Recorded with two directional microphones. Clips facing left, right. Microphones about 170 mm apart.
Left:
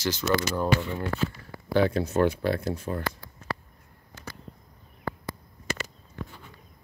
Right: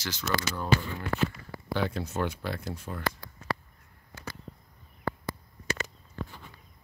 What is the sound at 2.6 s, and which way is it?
Speech, 60° left (ahead or behind).